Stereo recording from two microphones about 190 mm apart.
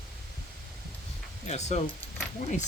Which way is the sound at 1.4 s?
35° left (ahead or behind).